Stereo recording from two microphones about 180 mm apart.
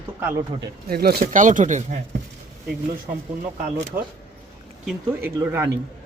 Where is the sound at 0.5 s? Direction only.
30° right (ahead or behind).